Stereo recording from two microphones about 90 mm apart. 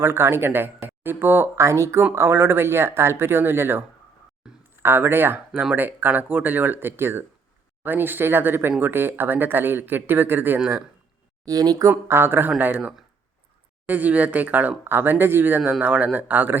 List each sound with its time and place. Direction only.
0.0 s speech: 25° right (ahead or behind)
4.4 s a sound: 5° right (ahead or behind)
4.8 s speech: 25° right (ahead or behind)
11.4 s speech: 45° right (ahead or behind); by 16.6 s 20° right (ahead or behind)